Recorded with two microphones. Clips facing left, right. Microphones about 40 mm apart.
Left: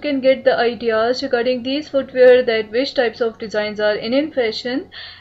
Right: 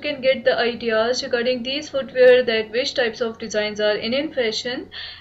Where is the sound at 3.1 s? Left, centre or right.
Centre.